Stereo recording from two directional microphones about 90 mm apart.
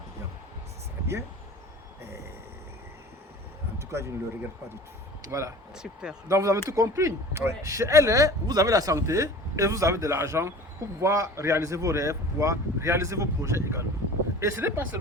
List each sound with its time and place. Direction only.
3.8 s speech: 30° right (ahead or behind)
5.7 s speech: 10° right (ahead or behind)
6.2 s speech: 35° right (ahead or behind)